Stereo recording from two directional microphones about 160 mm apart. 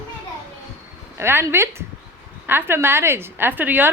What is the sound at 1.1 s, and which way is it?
A woman's voice, 15° right (ahead or behind).